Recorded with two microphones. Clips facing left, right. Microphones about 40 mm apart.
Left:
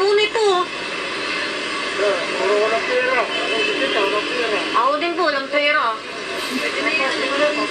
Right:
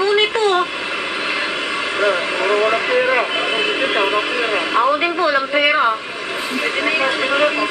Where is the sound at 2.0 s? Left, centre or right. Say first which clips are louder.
Right 2 dB; right.